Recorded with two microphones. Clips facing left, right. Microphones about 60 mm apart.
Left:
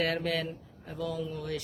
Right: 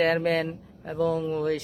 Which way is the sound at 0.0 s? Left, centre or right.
Right.